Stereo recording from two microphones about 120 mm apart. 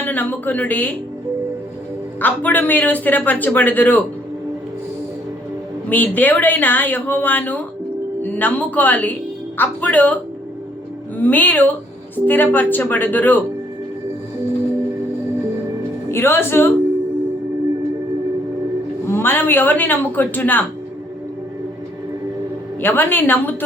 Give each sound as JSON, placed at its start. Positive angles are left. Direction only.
{"t": 0.0, "sound": "speech", "side_deg": 15}
{"t": 2.2, "sound": "a man's voice", "side_deg": 15}
{"t": 5.9, "sound": "a man's voice", "side_deg": 15}
{"t": 11.2, "sound": "a man's voice", "side_deg": 15}
{"t": 16.1, "sound": "speech", "side_deg": 20}
{"t": 19.0, "sound": "a man's voice", "side_deg": 20}
{"t": 22.8, "sound": "a man's voice", "side_deg": 15}